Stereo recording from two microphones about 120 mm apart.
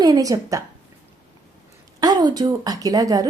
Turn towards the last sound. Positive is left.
turn(degrees=-30)  # may be behind; listen again after turning